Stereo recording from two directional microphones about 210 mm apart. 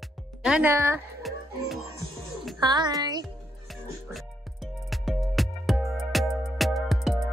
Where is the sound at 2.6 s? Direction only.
20° right (ahead or behind).